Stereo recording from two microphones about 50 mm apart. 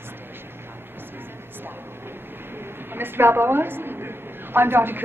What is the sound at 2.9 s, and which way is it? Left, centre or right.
A woman's voice, right.